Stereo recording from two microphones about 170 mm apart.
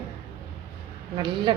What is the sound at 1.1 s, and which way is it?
Speech, 30° right (ahead or behind).